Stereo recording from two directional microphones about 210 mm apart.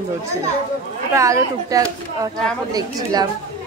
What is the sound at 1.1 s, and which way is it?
Speech, 15° right (ahead or behind).